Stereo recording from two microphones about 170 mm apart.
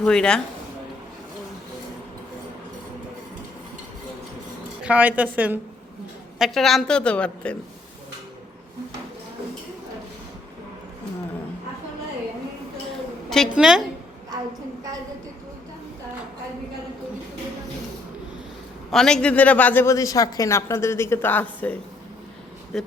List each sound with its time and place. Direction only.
0.0 s a woman's voice: 5° left (ahead or behind)
4.8 s a woman's voice: 10° right (ahead or behind)
13.3 s a woman's voice: centre (ahead or behind)
18.9 s a man's voice: 5° left (ahead or behind)